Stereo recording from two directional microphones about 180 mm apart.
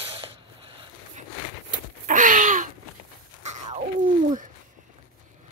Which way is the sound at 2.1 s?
45° right (ahead or behind).